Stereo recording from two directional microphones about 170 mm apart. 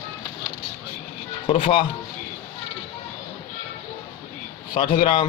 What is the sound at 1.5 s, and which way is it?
Speech, 30° left (ahead or behind).